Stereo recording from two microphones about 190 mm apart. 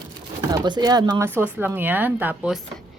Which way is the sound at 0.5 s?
20° right (ahead or behind).